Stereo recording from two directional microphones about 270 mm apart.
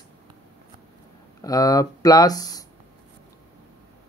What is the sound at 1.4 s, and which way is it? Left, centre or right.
Speech, centre.